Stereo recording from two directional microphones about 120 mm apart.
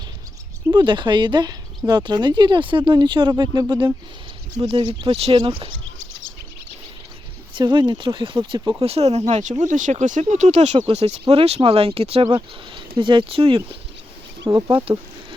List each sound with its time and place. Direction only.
0.7 s speech: 40° right (ahead or behind)
4.6 s speech: 90° right
4.9 s speech: 50° right (ahead or behind)
7.5 s speech: 35° right (ahead or behind)
8.8 s speech: 60° right (ahead or behind); by 10.8 s 75° right (ahead or behind)
10.9 s speech: 65° right (ahead or behind)
12.3 s speech: 40° right (ahead or behind)
14.4 s speech: 35° right (ahead or behind)